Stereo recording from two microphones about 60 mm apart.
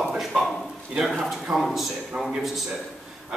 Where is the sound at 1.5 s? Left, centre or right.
Centre.